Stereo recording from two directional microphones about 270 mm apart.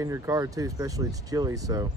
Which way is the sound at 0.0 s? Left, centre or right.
Centre.